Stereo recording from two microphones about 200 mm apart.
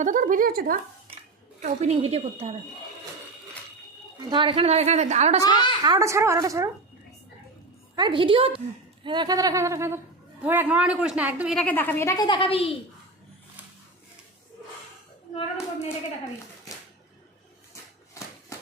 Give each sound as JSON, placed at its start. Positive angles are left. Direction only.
{"t": 0.0, "sound": "a woman's voice", "side_deg": -40}
{"t": 1.6, "sound": "a woman's voice", "side_deg": -35}
{"t": 4.3, "sound": "a woman's voice", "side_deg": -25}
{"t": 5.4, "sound": "a woman's voice", "side_deg": 20}
{"t": 5.8, "sound": "speech", "side_deg": -20}
{"t": 7.9, "sound": "a woman's voice", "side_deg": -25}
{"t": 11.6, "sound": "speech", "side_deg": 10}